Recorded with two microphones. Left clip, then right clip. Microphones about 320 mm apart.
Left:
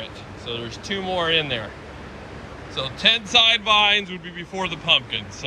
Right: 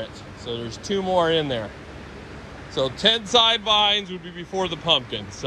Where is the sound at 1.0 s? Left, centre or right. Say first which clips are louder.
Right 1 dB; right.